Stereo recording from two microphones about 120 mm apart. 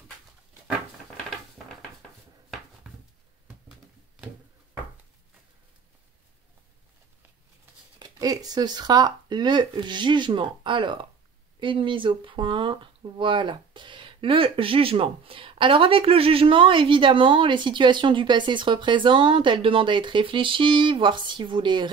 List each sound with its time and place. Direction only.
8.0 s speech: 30° right (ahead or behind)